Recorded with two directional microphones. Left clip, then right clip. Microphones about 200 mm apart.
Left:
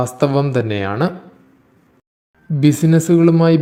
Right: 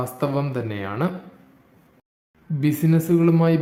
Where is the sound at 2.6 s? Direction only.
30° left (ahead or behind).